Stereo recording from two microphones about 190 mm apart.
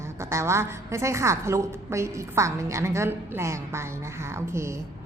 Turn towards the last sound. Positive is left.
turn(degrees=-15)  # may be behind; listen again after turning